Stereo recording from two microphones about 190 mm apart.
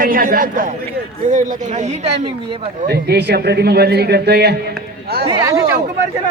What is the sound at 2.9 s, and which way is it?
A man's voice, 60° right (ahead or behind).